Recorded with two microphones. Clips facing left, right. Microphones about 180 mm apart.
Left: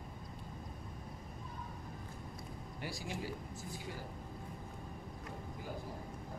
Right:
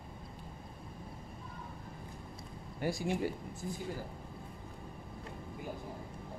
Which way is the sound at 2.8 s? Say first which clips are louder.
Right 10 dB; 55° right (ahead or behind).